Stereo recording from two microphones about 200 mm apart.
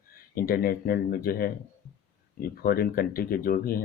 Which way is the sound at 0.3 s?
45° left (ahead or behind).